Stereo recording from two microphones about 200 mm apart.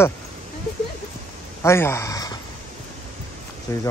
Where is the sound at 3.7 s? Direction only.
15° left (ahead or behind).